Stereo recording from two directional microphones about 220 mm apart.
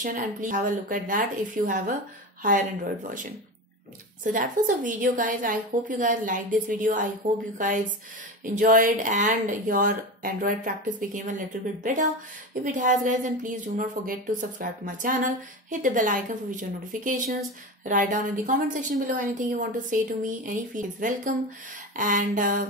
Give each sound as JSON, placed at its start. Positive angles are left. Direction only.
{"t": 0.0, "sound": "a woman's voice", "side_deg": -35}